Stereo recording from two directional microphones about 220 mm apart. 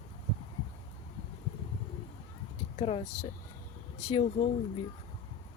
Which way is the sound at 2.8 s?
25° left (ahead or behind).